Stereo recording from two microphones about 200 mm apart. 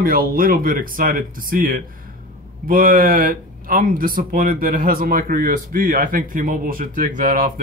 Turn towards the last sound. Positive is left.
turn(degrees=-40)  # may be behind; listen again after turning